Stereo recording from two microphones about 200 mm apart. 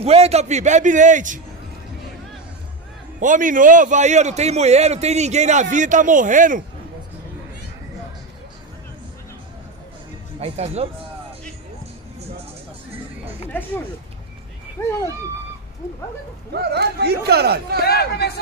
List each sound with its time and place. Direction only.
0.0 s a man's voice: 30° right (ahead or behind)
3.2 s a man's voice: 40° right (ahead or behind)
10.4 s a man's voice: 30° right (ahead or behind)
14.8 s speech: 15° left (ahead or behind)
16.5 s speech: 55° right (ahead or behind)
17.8 s speech: 55° left (ahead or behind)